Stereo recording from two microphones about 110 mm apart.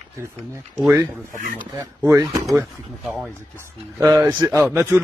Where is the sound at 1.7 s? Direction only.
25° right (ahead or behind).